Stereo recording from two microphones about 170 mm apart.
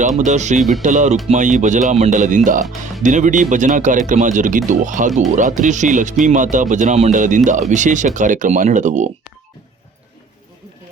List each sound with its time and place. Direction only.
0.2 s speech: 45° right (ahead or behind)